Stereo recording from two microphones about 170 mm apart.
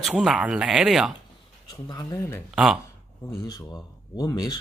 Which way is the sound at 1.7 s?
25° left (ahead or behind).